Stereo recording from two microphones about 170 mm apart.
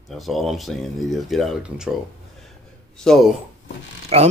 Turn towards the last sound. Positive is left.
turn(degrees=-35)  # may be behind; listen again after turning